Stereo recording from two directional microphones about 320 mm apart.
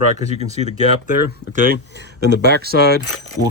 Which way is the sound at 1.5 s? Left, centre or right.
Right.